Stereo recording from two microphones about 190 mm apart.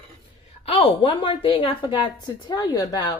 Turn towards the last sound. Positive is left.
turn(degrees=20)  # may be behind; listen again after turning